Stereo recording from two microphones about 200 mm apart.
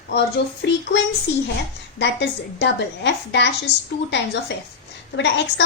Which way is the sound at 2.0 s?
60° left (ahead or behind).